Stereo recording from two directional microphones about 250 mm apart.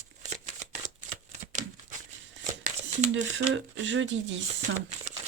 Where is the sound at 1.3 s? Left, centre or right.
Right.